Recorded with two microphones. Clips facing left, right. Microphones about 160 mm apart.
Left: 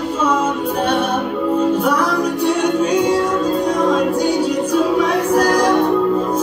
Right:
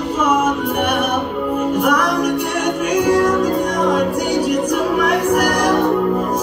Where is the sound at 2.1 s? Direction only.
15° right (ahead or behind).